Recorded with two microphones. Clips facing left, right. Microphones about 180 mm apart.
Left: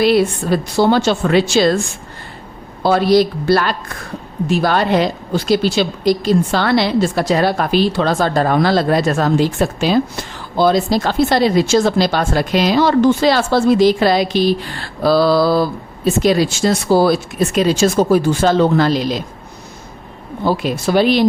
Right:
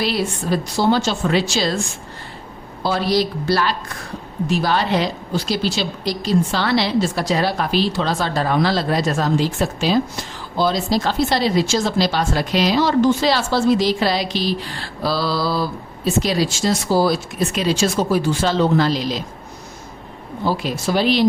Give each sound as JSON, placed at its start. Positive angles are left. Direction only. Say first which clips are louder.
{"t": 0.0, "sound": "a woman's voice", "louder": "left 8 dB", "side_deg": 55}
{"t": 2.8, "sound": "a woman's voice", "louder": "left 7 dB", "side_deg": 55}
{"t": 20.4, "sound": "a woman's voice", "louder": "left 4 dB", "side_deg": 60}